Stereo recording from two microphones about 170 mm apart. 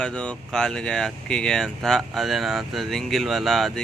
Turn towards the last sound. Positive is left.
turn(degrees=0)  # may be behind; listen again after turning